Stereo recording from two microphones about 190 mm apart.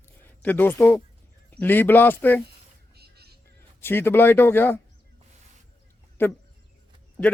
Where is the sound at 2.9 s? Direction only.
55° right (ahead or behind).